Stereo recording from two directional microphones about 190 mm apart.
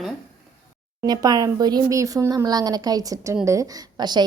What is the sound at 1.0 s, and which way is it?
Speech, 20° right (ahead or behind).